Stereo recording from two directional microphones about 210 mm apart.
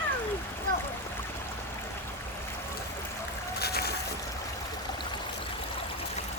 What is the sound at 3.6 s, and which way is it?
Boat, 50° left (ahead or behind).